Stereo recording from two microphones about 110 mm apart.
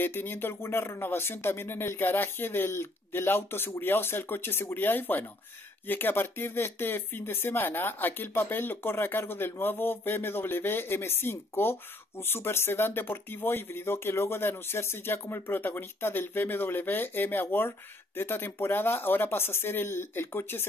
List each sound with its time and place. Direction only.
0.0 s speech: 20° left (ahead or behind)